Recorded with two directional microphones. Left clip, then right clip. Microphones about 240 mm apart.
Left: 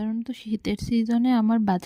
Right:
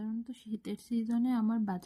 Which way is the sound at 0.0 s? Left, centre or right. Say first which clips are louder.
Left 10 dB; left.